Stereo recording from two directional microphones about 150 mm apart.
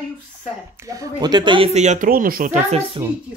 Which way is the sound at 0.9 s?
25° right (ahead or behind).